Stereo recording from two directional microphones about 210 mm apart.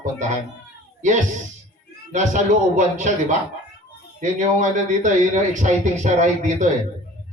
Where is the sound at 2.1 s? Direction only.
35° right (ahead or behind).